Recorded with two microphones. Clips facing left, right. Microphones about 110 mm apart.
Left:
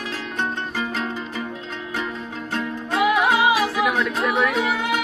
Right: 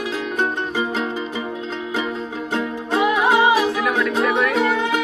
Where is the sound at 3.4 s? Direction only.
10° left (ahead or behind).